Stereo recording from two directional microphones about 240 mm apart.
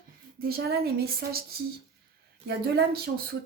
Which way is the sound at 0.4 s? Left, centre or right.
Right.